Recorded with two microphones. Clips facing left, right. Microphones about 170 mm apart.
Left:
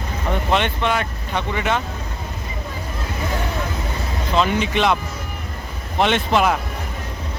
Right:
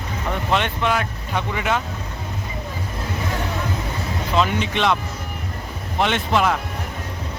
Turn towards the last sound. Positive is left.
turn(degrees=15)  # may be behind; listen again after turning